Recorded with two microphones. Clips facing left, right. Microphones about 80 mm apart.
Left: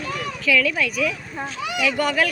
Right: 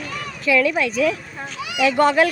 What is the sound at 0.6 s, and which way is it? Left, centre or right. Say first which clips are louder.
A woman's voice: right 5 dB; right.